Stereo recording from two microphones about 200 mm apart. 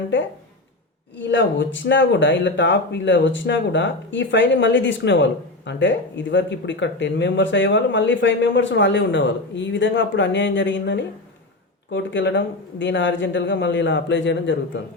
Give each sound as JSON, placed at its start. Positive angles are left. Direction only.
{"t": 1.3, "sound": "speech", "side_deg": 65}